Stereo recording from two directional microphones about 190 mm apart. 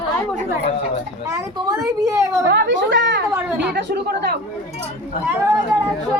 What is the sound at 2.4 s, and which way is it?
A woman's voice, 70° right (ahead or behind).